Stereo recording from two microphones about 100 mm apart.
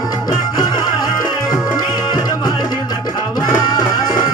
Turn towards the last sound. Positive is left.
turn(degrees=40)  # may be behind; listen again after turning